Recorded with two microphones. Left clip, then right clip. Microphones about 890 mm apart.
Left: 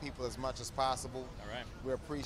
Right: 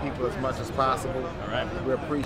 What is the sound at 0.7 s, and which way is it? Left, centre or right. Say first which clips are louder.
Speech: right 9 dB; left.